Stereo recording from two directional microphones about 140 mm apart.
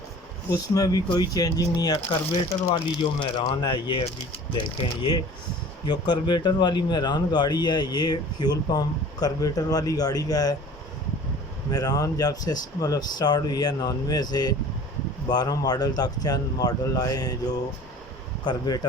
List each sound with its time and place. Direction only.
0.5 s speech: 25° left (ahead or behind)
5.8 s speech: 30° left (ahead or behind)
11.7 s speech: 25° left (ahead or behind)
18.4 s speech: 30° left (ahead or behind)